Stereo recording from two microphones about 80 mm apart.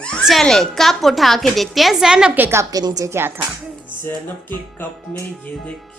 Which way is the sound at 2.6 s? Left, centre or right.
Right.